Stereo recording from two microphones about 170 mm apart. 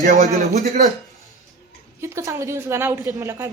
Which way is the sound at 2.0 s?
15° right (ahead or behind).